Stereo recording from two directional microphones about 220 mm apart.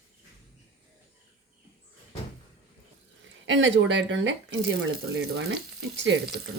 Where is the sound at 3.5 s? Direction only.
55° right (ahead or behind).